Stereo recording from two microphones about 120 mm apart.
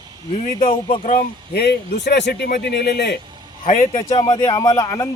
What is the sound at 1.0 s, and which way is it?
Speech, 90° left.